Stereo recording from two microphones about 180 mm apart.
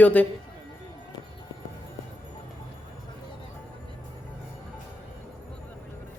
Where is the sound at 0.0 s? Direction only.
10° left (ahead or behind).